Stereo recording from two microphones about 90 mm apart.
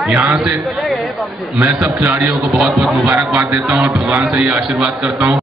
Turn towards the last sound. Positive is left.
turn(degrees=-10)  # may be behind; listen again after turning